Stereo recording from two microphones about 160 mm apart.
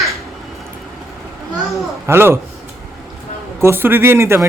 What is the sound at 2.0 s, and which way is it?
Speech, 15° right (ahead or behind).